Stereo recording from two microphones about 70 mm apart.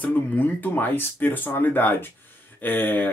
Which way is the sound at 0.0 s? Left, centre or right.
Left.